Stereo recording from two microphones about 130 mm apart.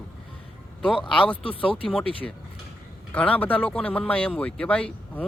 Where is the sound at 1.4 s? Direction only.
45° left (ahead or behind).